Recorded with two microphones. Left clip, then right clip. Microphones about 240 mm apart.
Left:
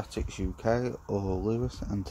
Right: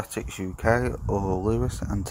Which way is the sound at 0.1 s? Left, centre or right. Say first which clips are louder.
Right 4 dB; centre.